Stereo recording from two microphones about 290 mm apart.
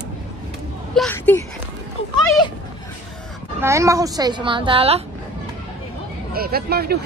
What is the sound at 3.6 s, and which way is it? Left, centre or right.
A woman's voice, centre.